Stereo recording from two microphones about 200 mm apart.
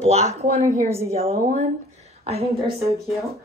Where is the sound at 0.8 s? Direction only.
15° right (ahead or behind).